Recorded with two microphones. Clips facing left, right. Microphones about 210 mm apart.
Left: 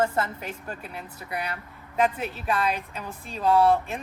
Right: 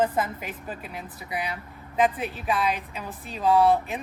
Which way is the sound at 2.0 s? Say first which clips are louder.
Right 1 dB; 10° right (ahead or behind).